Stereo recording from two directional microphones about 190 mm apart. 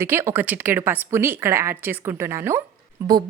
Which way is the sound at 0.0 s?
15° right (ahead or behind).